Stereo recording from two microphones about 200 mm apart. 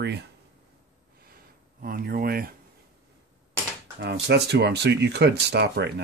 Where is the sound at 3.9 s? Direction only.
60° right (ahead or behind).